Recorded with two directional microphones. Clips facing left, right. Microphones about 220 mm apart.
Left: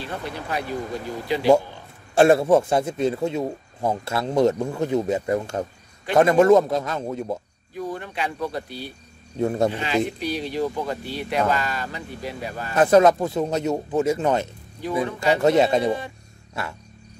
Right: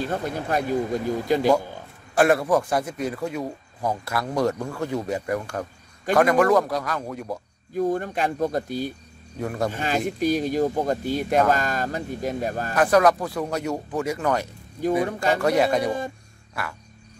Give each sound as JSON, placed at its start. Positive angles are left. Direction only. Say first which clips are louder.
{"t": 0.0, "sound": "speech", "louder": "right 5 dB", "side_deg": -45}
{"t": 2.1, "sound": "speech", "louder": "left 4 dB", "side_deg": 25}
{"t": 7.7, "sound": "speech", "louder": "right 6 dB", "side_deg": -45}
{"t": 9.4, "sound": "speech", "louder": "left 5 dB", "side_deg": 25}
{"t": 9.7, "sound": "speech", "louder": "left 2 dB", "side_deg": -45}
{"t": 12.7, "sound": "speech", "louder": "left 3 dB", "side_deg": 25}